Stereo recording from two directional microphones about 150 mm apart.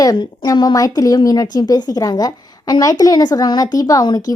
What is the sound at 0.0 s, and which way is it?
A woman's voice, 25° left (ahead or behind).